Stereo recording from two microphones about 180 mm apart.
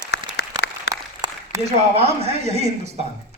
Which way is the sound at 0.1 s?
65° left (ahead or behind).